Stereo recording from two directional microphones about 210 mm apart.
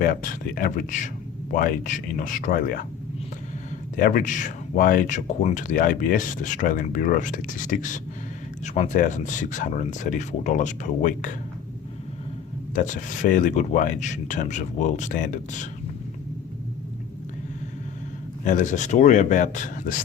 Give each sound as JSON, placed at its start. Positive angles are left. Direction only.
{"t": 0.0, "sound": "speech", "side_deg": 40}
{"t": 3.9, "sound": "speech", "side_deg": 40}
{"t": 12.7, "sound": "speech", "side_deg": 35}
{"t": 18.4, "sound": "speech", "side_deg": 35}